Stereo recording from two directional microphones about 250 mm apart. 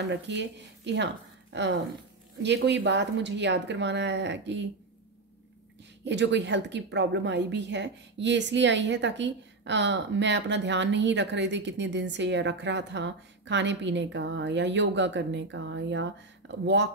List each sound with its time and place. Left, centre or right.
0.1 s a woman's voice: right
6.0 s a woman's voice: right